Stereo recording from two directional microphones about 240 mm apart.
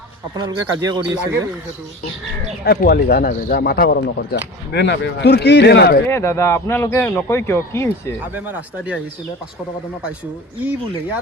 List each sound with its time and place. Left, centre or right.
0.3 s speech: centre
2.6 s speech: left
6.1 s speech: centre
8.4 s speech: centre
10.6 s speech: centre